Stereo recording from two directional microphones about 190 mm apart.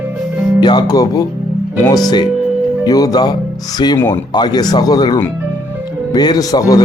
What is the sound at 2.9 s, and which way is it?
Speech, 20° left (ahead or behind).